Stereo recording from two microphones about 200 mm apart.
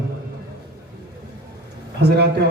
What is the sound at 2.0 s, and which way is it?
Speech, 55° right (ahead or behind).